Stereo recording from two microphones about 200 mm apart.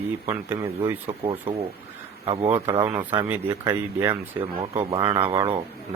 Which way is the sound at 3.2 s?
10° right (ahead or behind).